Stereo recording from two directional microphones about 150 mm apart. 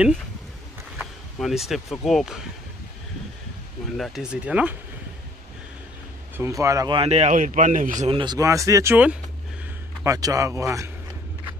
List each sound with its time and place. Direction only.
0.9 s speech: centre (ahead or behind)
3.9 s speech: centre (ahead or behind)
6.3 s speech: 20° right (ahead or behind)
6.9 s a man's voice: 40° right (ahead or behind); by 8.1 s 60° right (ahead or behind)
8.1 s a man's voice: 35° right (ahead or behind)
8.4 s speech: 20° right (ahead or behind)
10.0 s speech: 20° right (ahead or behind)